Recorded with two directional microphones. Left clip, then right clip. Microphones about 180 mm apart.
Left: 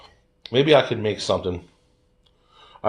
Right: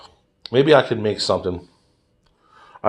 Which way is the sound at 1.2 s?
25° right (ahead or behind).